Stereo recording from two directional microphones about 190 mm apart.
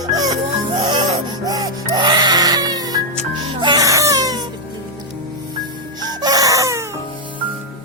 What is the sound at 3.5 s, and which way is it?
Baby cry, 20° right (ahead or behind).